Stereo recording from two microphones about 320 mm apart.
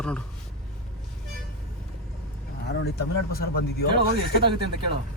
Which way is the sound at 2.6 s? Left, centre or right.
Left.